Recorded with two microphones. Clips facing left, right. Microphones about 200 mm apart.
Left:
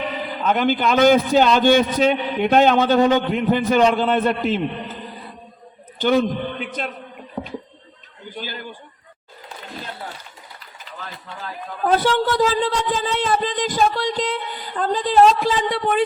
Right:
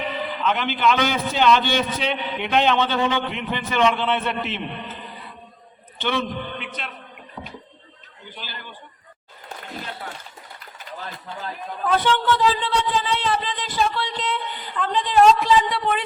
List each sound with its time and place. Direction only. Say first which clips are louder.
0.4 s a man's voice: left 3 dB; 40° left (ahead or behind)
6.0 s a man's voice: left 7 dB; 40° left (ahead or behind)
8.4 s a man's voice: left 8 dB; 45° left (ahead or behind)
11.9 s speech: left 2 dB; 35° left (ahead or behind)
15.7 s a man's voice: left 5 dB; 50° left (ahead or behind)